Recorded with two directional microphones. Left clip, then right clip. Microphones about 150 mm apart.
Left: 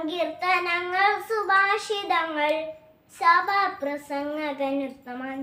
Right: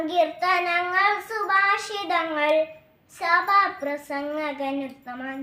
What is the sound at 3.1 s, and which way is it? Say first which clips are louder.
A child's voice: even; 20° left (ahead or behind).